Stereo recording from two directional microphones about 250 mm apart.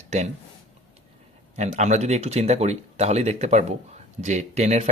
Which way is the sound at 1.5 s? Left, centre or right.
Right.